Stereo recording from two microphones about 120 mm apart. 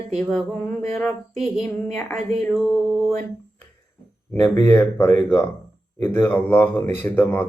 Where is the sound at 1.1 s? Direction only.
Centre (ahead or behind).